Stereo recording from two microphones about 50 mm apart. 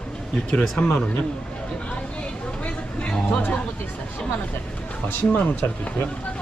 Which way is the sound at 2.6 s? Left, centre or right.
Left.